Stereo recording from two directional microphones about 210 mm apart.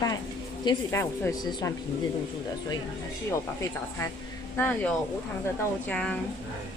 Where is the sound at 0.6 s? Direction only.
15° left (ahead or behind).